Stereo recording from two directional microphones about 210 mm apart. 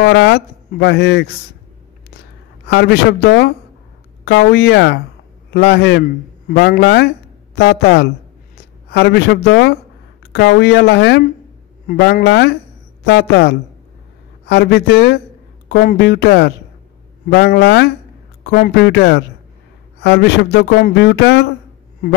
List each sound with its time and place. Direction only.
0.0 s speech: 50° left (ahead or behind)
2.7 s speech: 55° left (ahead or behind)